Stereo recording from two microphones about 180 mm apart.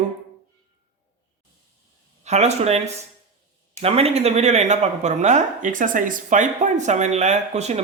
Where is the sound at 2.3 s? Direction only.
40° right (ahead or behind).